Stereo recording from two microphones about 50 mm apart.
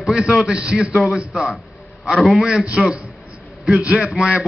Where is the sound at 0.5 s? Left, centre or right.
Right.